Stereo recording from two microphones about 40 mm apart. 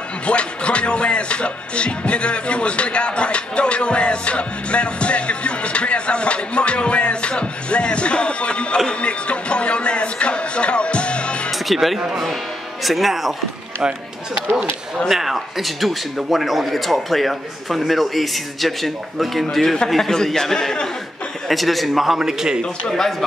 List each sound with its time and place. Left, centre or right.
0.3 s music: left
11.5 s a man's voice: centre
15.0 s a man's voice: centre
22.8 s a man's voice: centre